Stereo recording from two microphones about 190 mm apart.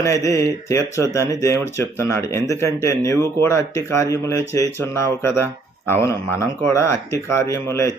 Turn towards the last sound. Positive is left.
turn(degrees=15)  # may be behind; listen again after turning